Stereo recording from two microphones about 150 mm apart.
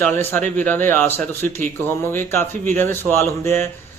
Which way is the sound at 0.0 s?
15° left (ahead or behind).